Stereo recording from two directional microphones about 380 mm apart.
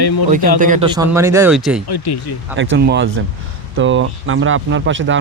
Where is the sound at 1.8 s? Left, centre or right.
Left.